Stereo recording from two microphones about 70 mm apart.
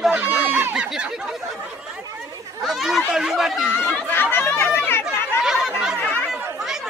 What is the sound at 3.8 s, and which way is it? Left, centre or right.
Chatter, left.